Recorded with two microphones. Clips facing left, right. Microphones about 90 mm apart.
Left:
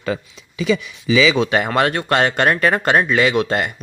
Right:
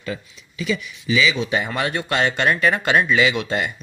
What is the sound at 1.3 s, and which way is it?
Speech, 65° left (ahead or behind).